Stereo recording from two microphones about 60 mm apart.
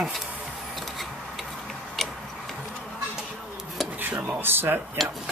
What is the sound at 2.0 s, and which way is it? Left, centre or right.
Tick-tock, centre.